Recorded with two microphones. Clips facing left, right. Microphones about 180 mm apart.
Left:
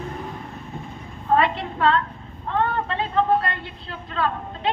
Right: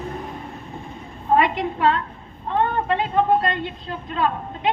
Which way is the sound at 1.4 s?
15° right (ahead or behind).